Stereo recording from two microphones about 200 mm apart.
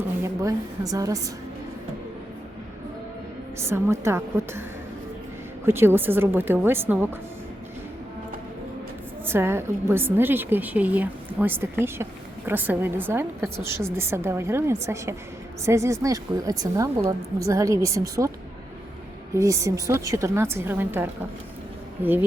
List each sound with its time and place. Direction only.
0.4 s a woman's voice: 15° right (ahead or behind)
3.6 s a woman's voice: 15° right (ahead or behind)
5.6 s a woman's voice: 10° right (ahead or behind)
9.2 s a woman's voice: 10° right (ahead or behind)
19.3 s a woman's voice: 15° right (ahead or behind)